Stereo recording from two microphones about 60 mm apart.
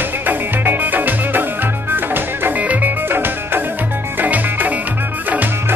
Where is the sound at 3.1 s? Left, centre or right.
Right.